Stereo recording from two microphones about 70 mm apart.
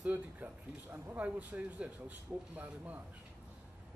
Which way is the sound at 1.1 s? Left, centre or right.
Right.